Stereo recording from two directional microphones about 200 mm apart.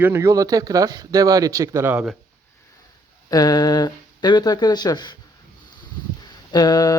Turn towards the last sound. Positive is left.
turn(degrees=20)  # may be behind; listen again after turning